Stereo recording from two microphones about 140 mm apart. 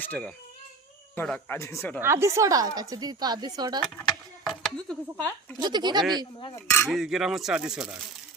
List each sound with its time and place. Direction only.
0.0 s speech: 10° left (ahead or behind)
2.0 s a woman's voice: 20° right (ahead or behind)
4.4 s speech: 5° left (ahead or behind)
5.5 s speech: 30° right (ahead or behind)
6.8 s speech: centre (ahead or behind)